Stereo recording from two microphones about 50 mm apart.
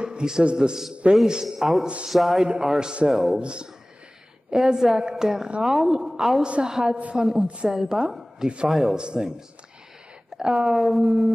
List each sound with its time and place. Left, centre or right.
0.0 s a man's voice: centre
2.0 s a sound: centre
2.4 s a woman's voice: centre
7.4 s a woman's voice: right
7.7 s a woman's voice: centre
8.1 s a sound: centre
8.6 s a woman's voice: centre
10.3 s speech: centre
10.7 s a sound: centre
11.1 s a woman's voice: centre